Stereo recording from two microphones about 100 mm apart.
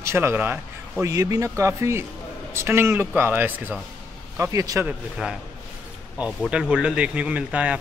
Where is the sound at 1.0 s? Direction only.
30° right (ahead or behind).